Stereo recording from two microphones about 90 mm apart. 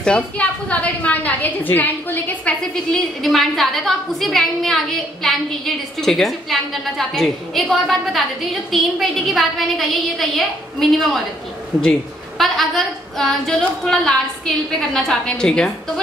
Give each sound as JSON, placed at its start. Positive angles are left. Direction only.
{"t": 0.0, "sound": "a woman's voice", "side_deg": 15}
{"t": 2.7, "sound": "a woman's voice", "side_deg": 5}